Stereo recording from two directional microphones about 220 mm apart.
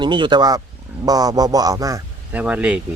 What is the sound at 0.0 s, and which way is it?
A man's voice, 20° right (ahead or behind).